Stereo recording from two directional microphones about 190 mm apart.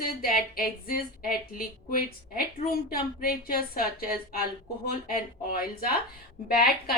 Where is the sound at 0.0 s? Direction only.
50° left (ahead or behind).